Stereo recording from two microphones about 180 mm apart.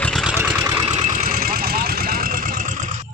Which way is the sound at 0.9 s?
35° right (ahead or behind).